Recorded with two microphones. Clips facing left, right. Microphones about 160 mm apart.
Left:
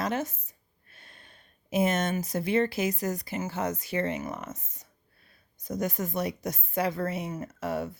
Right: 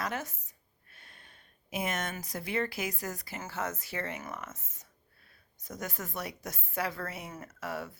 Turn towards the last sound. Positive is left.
turn(degrees=20)  # may be behind; listen again after turning